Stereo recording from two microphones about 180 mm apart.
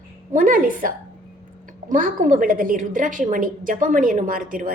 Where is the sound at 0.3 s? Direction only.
50° right (ahead or behind).